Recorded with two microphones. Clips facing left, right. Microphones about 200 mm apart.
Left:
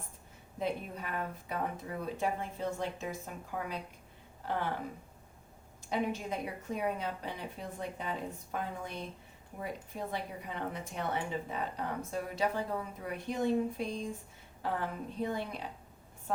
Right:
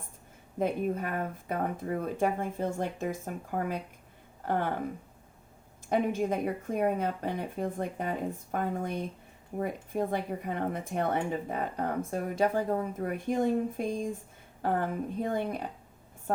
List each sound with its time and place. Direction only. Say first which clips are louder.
0.6 s speech: right 7 dB; 50° right (ahead or behind)
5.9 s speech: right 6 dB; 50° right (ahead or behind)